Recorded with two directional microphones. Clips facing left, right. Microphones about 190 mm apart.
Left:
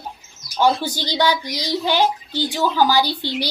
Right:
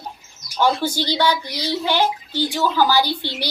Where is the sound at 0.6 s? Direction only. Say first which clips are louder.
Left 1 dB; 15° left (ahead or behind).